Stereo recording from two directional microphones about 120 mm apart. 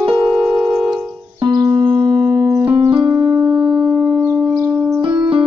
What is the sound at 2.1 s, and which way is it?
Music, 5° right (ahead or behind).